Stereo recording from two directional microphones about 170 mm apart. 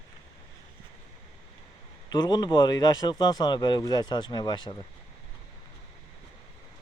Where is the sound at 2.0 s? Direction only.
25° left (ahead or behind).